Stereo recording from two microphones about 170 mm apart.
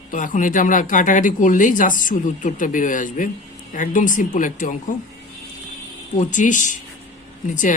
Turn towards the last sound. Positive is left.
turn(degrees=50)  # may be behind; listen again after turning